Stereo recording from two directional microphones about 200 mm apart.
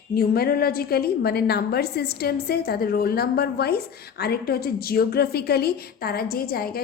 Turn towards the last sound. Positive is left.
turn(degrees=50)  # may be behind; listen again after turning